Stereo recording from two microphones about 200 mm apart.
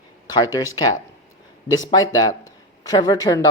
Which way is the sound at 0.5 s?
20° left (ahead or behind).